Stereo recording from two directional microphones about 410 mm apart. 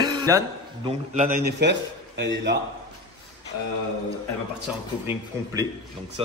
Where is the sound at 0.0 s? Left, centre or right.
Centre.